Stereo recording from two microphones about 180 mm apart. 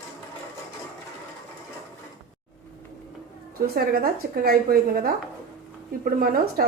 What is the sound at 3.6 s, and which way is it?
Speech, 55° right (ahead or behind).